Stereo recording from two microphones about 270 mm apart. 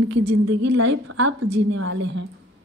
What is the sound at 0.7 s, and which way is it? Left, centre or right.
Speech, right.